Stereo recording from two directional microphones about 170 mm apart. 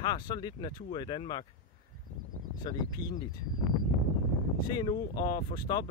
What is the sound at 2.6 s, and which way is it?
Speech, 25° left (ahead or behind).